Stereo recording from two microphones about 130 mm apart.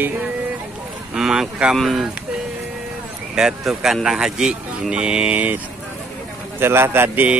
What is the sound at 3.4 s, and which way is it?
Speech, 5° right (ahead or behind).